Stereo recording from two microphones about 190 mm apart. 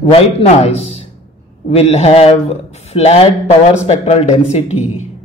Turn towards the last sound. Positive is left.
turn(degrees=35)  # may be behind; listen again after turning